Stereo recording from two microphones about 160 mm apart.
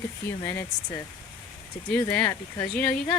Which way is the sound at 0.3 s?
15° left (ahead or behind).